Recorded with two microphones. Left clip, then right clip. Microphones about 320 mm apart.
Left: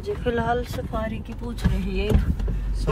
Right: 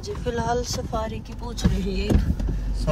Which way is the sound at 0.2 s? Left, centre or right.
Centre.